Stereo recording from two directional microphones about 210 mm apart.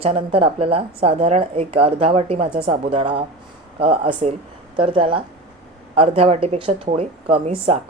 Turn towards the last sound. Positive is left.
turn(degrees=-30)  # may be behind; listen again after turning